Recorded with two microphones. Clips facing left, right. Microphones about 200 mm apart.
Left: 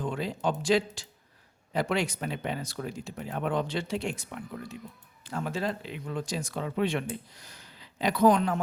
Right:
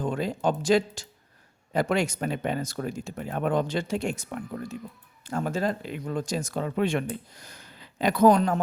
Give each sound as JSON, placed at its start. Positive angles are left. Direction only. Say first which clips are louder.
{"t": 0.0, "sound": "speech", "louder": "right 4 dB", "side_deg": -45}